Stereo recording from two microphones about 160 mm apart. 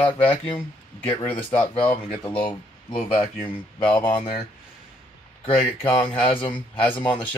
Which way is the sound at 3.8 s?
30° left (ahead or behind).